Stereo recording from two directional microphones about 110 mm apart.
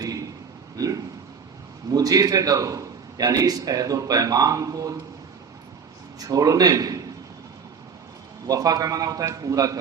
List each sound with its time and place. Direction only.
0.0 s a sound: 35° right (ahead or behind)
0.8 s a man's voice: 35° right (ahead or behind)
6.1 s a man's voice: 35° right (ahead or behind)
8.4 s a man's voice: 35° right (ahead or behind)